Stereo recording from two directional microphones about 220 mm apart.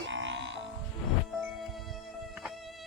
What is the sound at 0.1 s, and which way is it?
Music, 55° right (ahead or behind).